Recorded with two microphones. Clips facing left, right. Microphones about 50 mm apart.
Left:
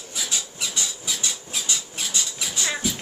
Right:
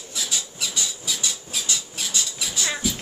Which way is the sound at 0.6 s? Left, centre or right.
Centre.